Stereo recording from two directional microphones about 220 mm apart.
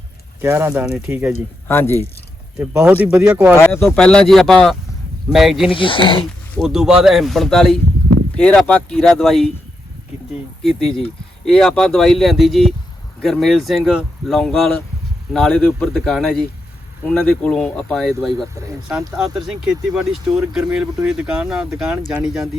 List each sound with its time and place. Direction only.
0.4 s speech: 10° right (ahead or behind)
1.6 s speech: 10° left (ahead or behind)
2.6 s speech: 10° right (ahead or behind)
3.6 s speech: 10° left (ahead or behind)
5.7 s speech: 25° left (ahead or behind)
6.6 s speech: centre (ahead or behind)
10.6 s speech: centre (ahead or behind)